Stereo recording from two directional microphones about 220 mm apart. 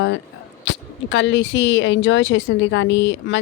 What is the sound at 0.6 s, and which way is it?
Speech, 55° left (ahead or behind).